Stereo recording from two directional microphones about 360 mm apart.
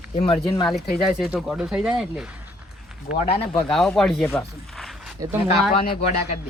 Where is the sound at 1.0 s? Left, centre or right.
Centre.